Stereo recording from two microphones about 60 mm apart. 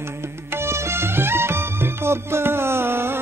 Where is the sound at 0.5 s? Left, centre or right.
Right.